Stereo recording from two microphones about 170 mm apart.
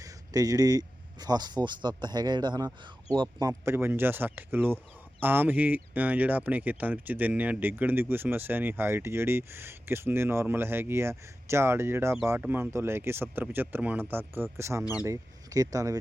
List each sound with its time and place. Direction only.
0.0 s speech: 20° right (ahead or behind)